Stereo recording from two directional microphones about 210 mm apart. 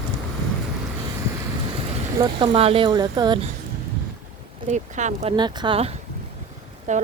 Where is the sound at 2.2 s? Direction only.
25° right (ahead or behind).